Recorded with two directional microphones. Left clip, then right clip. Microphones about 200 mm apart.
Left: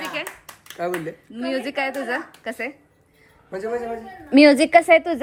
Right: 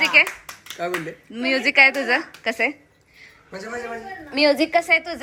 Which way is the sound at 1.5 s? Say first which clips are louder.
Right 10 dB; 50° left (ahead or behind).